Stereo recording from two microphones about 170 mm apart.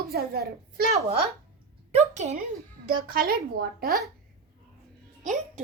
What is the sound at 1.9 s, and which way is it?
Speech, 40° right (ahead or behind).